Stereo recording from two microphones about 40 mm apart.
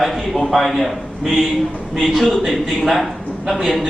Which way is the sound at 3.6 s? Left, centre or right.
Centre.